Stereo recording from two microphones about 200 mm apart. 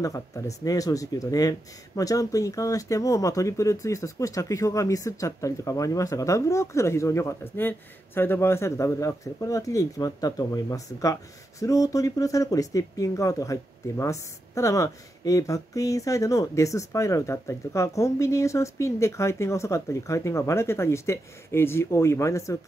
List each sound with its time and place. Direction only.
0.0 s speech: 15° left (ahead or behind)